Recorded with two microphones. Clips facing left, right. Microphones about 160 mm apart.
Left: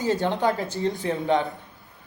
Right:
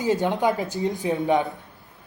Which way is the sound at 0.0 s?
20° right (ahead or behind).